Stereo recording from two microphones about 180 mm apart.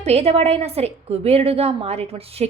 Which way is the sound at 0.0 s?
35° right (ahead or behind).